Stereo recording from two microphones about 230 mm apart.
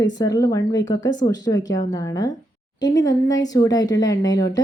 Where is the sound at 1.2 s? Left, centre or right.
Left.